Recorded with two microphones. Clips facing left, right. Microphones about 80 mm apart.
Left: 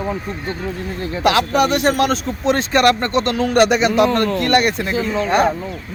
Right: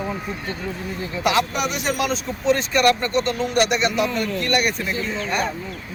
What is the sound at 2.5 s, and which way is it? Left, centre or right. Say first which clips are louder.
Speech: left 3 dB; left.